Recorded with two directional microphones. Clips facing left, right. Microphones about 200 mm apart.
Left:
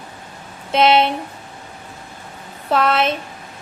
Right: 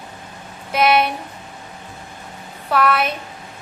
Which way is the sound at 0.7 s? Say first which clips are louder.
Left 2 dB; 25° left (ahead or behind).